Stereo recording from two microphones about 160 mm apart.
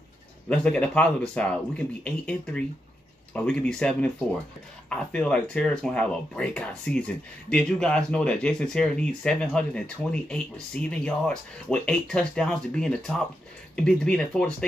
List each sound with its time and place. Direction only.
0.5 s speech: 10° left (ahead or behind)